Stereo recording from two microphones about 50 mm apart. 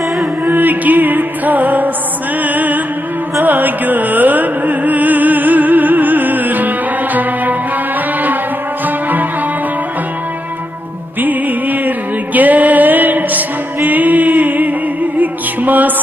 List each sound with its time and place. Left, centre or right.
0.2 s music: right
8.8 s music: right
11.1 s music: right